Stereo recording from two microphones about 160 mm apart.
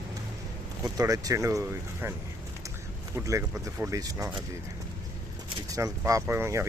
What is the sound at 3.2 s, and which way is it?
Speech, 20° right (ahead or behind).